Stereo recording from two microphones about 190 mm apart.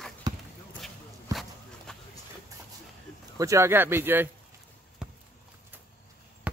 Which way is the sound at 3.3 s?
15° right (ahead or behind).